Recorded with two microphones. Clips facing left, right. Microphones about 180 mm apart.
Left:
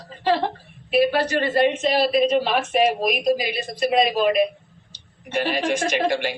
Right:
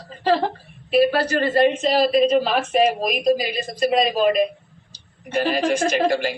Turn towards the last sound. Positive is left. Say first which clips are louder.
# right 2 dB
turn(degrees=-40)  # may be behind; listen again after turning